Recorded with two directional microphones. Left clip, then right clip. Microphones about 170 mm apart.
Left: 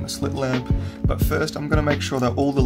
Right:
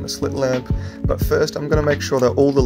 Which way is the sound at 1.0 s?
30° right (ahead or behind).